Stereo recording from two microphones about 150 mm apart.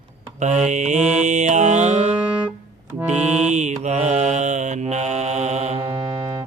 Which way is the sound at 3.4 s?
50° right (ahead or behind).